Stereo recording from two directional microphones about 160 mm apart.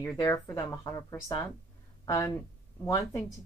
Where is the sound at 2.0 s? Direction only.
20° left (ahead or behind).